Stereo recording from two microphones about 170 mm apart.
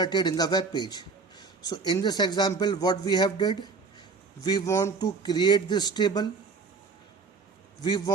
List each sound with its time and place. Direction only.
0.0 s a man's voice: 25° left (ahead or behind)
7.8 s a man's voice: 25° left (ahead or behind)